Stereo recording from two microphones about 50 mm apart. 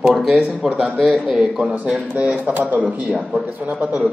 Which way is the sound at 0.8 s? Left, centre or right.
Centre.